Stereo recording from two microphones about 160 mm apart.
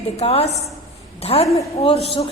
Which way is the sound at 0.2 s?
40° left (ahead or behind).